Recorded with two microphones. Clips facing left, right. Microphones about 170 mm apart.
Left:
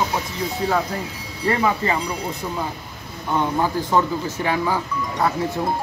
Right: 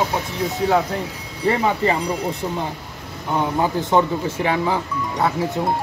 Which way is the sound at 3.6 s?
20° right (ahead or behind).